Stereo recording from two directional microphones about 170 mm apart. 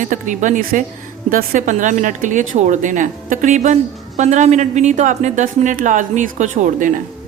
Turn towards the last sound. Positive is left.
turn(degrees=-45)  # may be behind; listen again after turning